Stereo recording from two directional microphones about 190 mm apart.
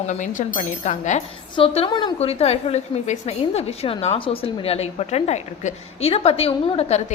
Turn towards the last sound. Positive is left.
turn(degrees=30)  # may be behind; listen again after turning